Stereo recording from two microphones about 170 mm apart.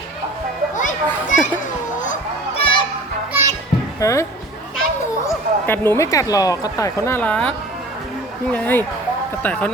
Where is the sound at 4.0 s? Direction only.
20° left (ahead or behind).